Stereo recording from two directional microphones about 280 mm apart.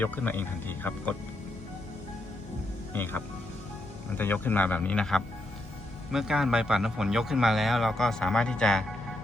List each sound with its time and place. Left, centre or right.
0.0 s speech: centre
2.9 s speech: centre